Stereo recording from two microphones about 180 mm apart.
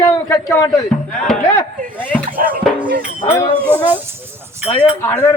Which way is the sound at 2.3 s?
50° right (ahead or behind).